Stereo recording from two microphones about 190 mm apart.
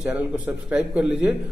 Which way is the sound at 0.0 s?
5° right (ahead or behind).